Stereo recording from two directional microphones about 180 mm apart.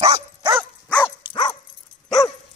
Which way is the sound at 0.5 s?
5° left (ahead or behind).